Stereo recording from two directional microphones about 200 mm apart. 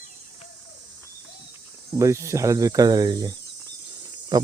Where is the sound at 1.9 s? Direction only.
15° right (ahead or behind).